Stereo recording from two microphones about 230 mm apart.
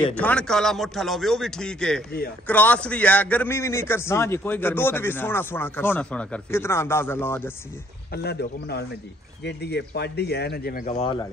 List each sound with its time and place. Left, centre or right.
0.0 s a man's voice: centre
8.1 s speech: left
11.0 s speech: left